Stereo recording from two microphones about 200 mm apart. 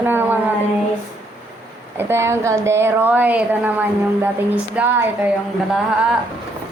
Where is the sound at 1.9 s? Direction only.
10° right (ahead or behind).